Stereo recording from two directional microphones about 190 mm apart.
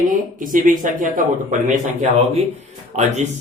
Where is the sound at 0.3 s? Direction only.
45° right (ahead or behind).